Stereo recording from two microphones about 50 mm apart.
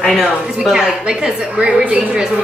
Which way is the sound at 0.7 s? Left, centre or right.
Centre.